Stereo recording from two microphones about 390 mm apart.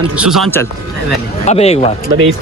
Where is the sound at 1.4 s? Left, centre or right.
Centre.